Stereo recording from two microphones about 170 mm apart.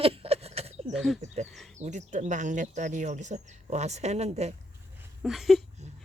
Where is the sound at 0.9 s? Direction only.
Centre (ahead or behind).